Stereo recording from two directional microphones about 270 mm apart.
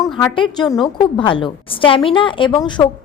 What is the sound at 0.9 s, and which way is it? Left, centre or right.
A woman's voice, centre.